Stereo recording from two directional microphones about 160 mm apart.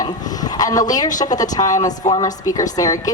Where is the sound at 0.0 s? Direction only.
25° left (ahead or behind).